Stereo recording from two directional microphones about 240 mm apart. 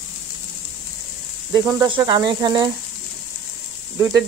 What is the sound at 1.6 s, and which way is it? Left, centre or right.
Speech, centre.